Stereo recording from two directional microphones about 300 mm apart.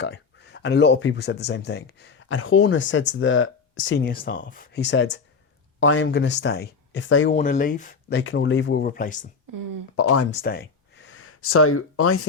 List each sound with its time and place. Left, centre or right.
0.0 s speech: left
7.3 s speech: left
8.2 s speech: left
9.5 s speech: right
9.9 s speech: left
10.3 s speech: left